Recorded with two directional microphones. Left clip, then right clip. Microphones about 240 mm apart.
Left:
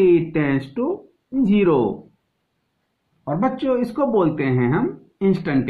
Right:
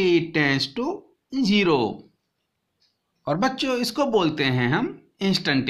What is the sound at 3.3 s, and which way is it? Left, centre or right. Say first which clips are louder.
Speech: left 2 dB; right.